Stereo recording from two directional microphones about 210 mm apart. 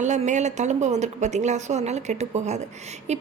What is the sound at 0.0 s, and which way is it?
A woman's voice, 35° right (ahead or behind).